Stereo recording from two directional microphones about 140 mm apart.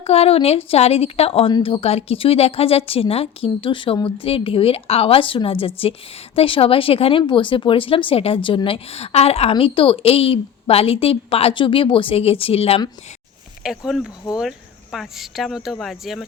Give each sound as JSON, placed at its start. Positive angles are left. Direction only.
{"t": 0.0, "sound": "a woman's voice", "side_deg": 45}
{"t": 13.6, "sound": "speech", "side_deg": -5}